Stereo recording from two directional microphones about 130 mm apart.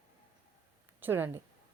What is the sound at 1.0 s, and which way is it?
Speech, 15° right (ahead or behind).